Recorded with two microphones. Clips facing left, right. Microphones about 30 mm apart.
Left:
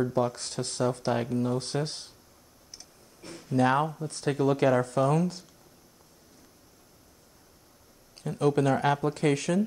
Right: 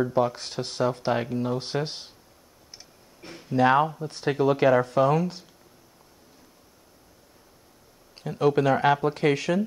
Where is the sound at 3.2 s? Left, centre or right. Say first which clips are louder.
Right 3 dB; centre.